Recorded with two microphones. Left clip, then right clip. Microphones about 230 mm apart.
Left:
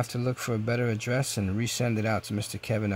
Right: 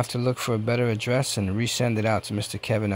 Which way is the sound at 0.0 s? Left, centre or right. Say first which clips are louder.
Right 5 dB; centre.